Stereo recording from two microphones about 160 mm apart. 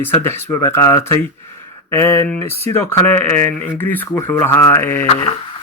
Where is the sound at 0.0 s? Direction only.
15° left (ahead or behind).